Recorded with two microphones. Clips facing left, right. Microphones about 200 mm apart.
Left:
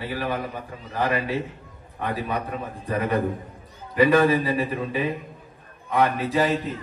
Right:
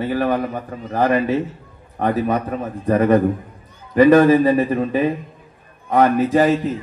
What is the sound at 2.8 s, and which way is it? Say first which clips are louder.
A man's voice: right 9 dB; 45° right (ahead or behind).